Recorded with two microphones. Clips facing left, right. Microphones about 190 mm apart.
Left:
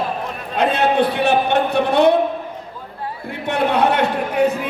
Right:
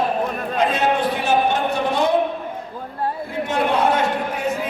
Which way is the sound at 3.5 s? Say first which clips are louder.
Left 2 dB; 65° left (ahead or behind).